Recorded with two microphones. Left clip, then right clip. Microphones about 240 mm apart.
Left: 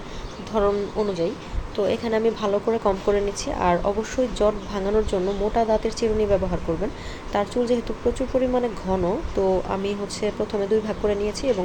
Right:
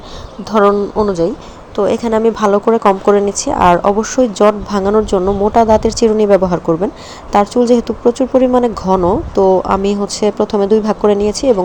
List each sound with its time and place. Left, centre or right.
0.5 s speech: right